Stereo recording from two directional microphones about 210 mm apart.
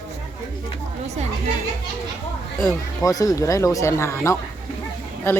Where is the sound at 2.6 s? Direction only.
15° left (ahead or behind).